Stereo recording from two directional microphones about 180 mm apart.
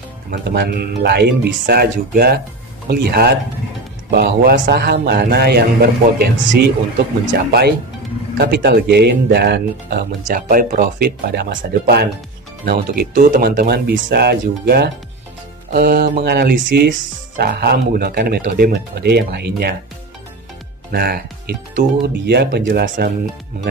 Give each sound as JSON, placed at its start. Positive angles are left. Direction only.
{"t": 0.3, "sound": "speech", "side_deg": -60}
{"t": 20.9, "sound": "speech", "side_deg": -60}